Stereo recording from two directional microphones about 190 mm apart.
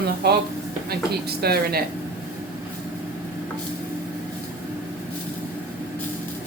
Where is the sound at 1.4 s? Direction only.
55° right (ahead or behind).